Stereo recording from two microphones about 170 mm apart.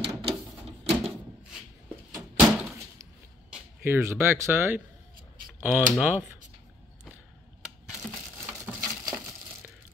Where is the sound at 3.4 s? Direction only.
10° right (ahead or behind).